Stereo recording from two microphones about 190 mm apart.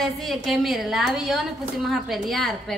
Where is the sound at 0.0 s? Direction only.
Centre (ahead or behind).